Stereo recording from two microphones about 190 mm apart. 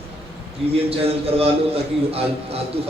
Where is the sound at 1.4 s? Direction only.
30° right (ahead or behind).